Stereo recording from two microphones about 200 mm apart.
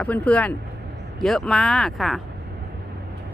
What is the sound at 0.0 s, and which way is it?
Speech, 5° left (ahead or behind).